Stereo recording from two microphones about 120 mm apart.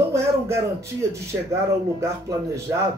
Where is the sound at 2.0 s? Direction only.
25° right (ahead or behind).